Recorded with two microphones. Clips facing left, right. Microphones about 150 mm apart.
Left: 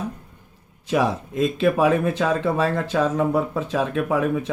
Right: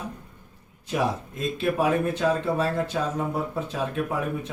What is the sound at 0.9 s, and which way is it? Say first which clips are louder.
Speech: left 5 dB; 90° left.